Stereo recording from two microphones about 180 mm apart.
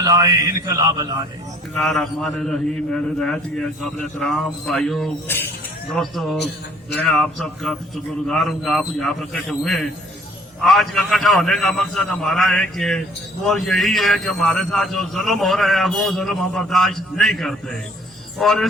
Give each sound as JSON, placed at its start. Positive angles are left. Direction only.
{"t": 0.0, "sound": "mantra", "side_deg": -20}
{"t": 1.7, "sound": "a man's voice", "side_deg": 0}